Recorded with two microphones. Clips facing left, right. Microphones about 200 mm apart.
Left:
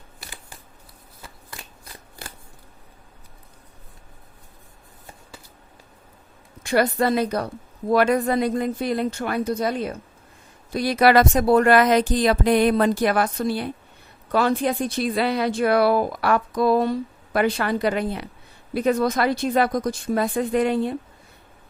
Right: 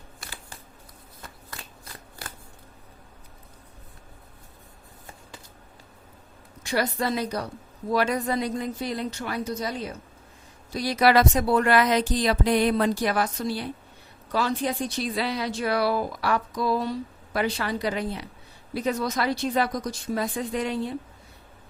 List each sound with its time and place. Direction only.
1.2 s shuffling cards: 15° left (ahead or behind)
6.6 s speech: 55° left (ahead or behind)